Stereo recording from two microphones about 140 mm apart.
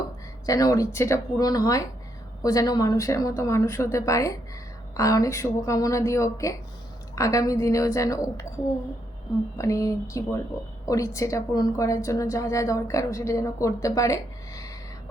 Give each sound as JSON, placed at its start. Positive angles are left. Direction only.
{"t": 0.4, "sound": "a woman's voice", "side_deg": 25}